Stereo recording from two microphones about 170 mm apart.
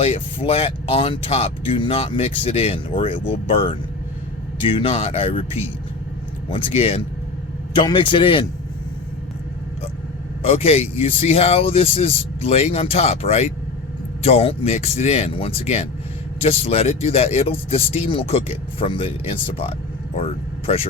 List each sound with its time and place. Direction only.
0.0 s speech: 35° left (ahead or behind)
6.5 s speech: 35° left (ahead or behind)
10.4 s speech: 35° left (ahead or behind)